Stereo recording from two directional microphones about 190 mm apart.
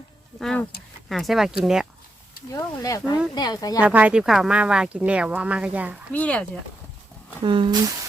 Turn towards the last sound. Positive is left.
turn(degrees=-25)  # may be behind; listen again after turning